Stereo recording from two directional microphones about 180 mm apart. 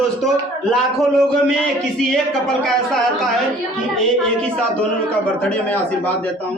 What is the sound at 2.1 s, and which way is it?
Speech, centre (ahead or behind).